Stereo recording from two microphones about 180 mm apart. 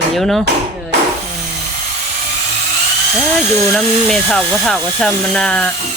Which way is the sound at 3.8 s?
Centre (ahead or behind).